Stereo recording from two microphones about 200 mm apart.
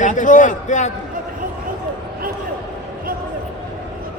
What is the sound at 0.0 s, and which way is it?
Speech, 40° left (ahead or behind).